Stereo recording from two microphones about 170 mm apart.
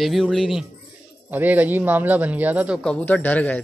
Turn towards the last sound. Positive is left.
turn(degrees=10)  # may be behind; listen again after turning